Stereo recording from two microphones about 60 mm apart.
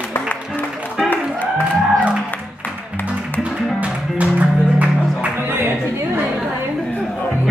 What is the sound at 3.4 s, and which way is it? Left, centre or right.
Music, right.